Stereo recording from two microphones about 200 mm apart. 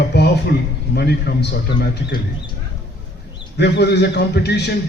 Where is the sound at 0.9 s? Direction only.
55° left (ahead or behind).